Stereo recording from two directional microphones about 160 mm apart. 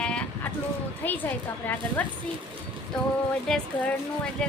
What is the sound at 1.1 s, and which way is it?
A woman's voice, 10° left (ahead or behind).